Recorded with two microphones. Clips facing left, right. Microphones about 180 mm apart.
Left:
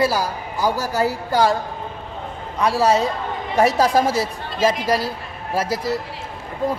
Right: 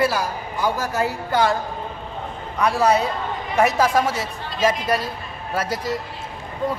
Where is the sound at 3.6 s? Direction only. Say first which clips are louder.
Left 2 dB; 35° left (ahead or behind).